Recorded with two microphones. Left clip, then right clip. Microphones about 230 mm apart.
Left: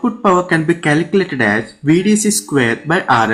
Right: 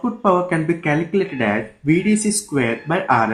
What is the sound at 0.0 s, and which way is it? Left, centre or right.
Speech, left.